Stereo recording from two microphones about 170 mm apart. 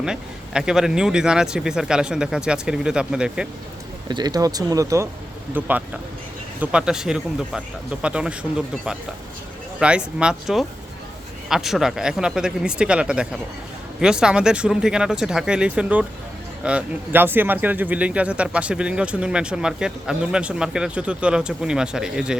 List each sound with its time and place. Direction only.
0.0 s speech: 5° right (ahead or behind)
4.1 s speech: 25° right (ahead or behind); by 22.4 s 5° right (ahead or behind)